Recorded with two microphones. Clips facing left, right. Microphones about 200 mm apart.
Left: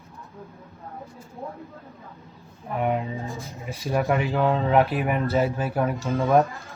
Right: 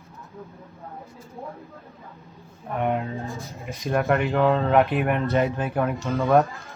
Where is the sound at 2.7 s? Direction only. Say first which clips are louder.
Even; centre (ahead or behind).